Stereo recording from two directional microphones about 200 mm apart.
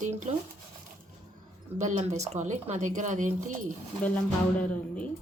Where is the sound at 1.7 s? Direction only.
35° right (ahead or behind).